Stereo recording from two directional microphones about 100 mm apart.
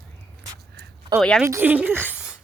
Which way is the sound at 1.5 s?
20° right (ahead or behind).